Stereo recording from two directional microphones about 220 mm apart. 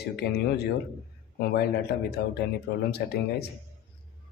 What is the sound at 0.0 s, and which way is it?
Speech, 45° left (ahead or behind).